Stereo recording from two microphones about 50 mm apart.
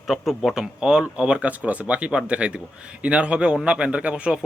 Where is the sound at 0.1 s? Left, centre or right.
Centre.